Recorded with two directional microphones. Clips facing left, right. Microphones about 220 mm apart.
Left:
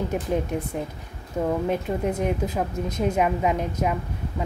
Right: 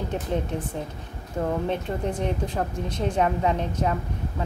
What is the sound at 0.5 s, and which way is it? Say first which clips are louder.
Speech: left 2 dB; 10° left (ahead or behind).